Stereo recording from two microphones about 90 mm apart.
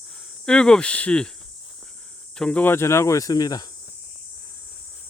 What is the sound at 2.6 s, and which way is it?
Speech, 25° left (ahead or behind).